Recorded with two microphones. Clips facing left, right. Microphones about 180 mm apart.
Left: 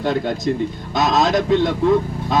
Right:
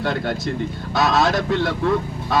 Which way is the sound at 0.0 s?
20° left (ahead or behind).